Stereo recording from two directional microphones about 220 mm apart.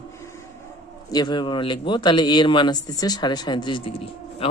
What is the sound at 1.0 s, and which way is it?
Speech, 20° left (ahead or behind).